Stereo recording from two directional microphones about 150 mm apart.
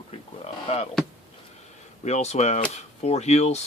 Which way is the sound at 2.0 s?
50° left (ahead or behind).